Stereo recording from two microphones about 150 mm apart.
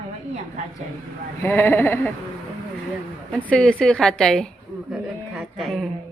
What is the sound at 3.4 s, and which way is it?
A woman's voice, 5° left (ahead or behind).